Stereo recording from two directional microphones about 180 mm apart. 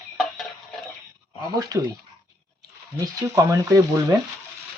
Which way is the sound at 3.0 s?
20° right (ahead or behind).